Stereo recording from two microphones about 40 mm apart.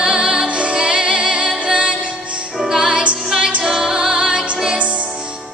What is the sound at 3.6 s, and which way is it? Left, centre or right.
Music, centre.